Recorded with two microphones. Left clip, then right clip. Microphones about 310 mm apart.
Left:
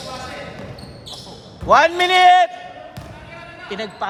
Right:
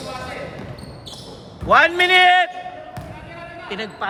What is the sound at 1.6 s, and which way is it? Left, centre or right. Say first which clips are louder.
Speech: even; centre.